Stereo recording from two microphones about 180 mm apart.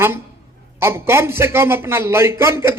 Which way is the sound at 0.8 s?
15° right (ahead or behind).